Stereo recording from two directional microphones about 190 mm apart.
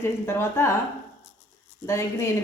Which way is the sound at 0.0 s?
15° left (ahead or behind).